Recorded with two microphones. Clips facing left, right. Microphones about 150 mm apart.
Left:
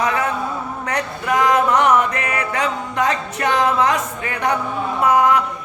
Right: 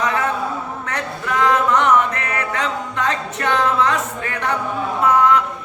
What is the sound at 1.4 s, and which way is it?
Music, 10° left (ahead or behind).